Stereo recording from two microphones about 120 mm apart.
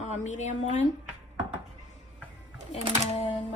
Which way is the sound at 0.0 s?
75° left (ahead or behind).